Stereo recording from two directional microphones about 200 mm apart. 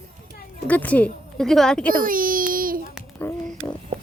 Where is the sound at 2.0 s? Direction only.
45° right (ahead or behind).